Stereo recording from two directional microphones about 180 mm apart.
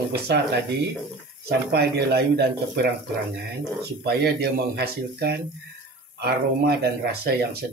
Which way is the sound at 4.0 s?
60° right (ahead or behind).